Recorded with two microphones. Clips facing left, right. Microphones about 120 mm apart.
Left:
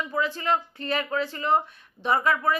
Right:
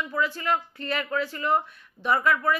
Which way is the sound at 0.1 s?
25° left (ahead or behind).